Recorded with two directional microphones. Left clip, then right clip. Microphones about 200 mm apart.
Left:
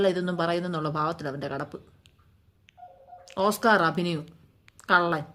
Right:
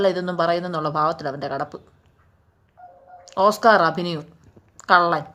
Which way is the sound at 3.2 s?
25° left (ahead or behind).